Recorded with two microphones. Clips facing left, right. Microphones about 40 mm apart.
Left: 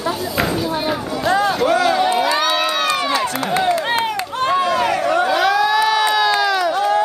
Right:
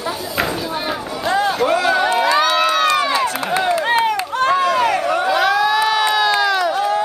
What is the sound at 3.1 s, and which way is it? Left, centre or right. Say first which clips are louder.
Crowd: right 1 dB; right.